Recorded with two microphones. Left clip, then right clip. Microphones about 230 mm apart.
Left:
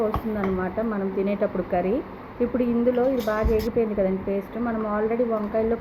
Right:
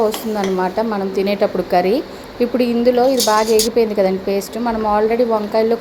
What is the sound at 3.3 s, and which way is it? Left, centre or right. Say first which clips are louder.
Speech: right 10 dB; right.